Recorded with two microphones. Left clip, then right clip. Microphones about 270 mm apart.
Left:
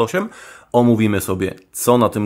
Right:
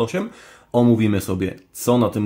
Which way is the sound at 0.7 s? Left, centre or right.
Left.